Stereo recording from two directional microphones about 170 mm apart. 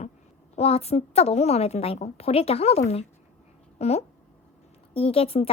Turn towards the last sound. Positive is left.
turn(degrees=35)  # may be behind; listen again after turning